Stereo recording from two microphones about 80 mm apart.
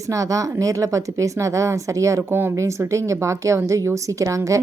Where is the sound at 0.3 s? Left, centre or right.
Right.